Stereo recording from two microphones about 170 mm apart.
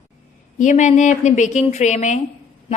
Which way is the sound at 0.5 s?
45° left (ahead or behind).